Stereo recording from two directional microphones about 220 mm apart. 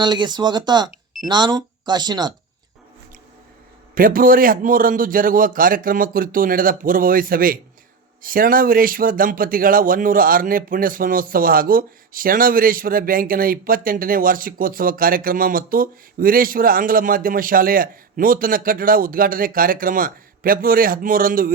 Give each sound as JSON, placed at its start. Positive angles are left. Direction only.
{"t": 0.0, "sound": "speech", "side_deg": -20}
{"t": 3.9, "sound": "speech", "side_deg": -40}